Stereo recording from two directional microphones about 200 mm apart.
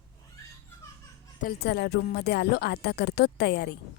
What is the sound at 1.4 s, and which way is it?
Speech, 50° left (ahead or behind).